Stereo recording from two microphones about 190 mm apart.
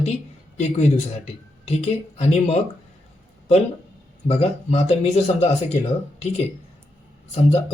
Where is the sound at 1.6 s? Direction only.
35° left (ahead or behind).